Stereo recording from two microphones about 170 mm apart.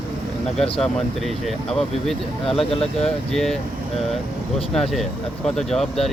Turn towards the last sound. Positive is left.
turn(degrees=0)  # may be behind; listen again after turning